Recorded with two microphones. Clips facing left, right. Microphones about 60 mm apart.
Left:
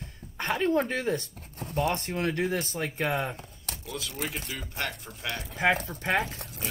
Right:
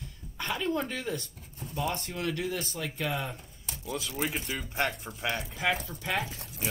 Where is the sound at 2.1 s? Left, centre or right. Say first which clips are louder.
Left 4 dB; left.